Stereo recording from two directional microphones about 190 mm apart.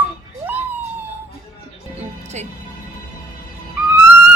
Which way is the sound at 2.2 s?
35° right (ahead or behind).